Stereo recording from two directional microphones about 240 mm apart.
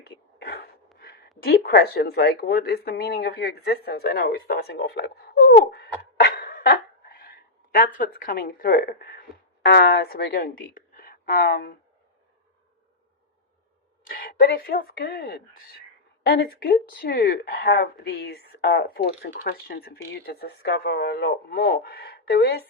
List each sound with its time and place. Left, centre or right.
0.0 s a sound: left
1.4 s a woman's voice: left
14.1 s speech: left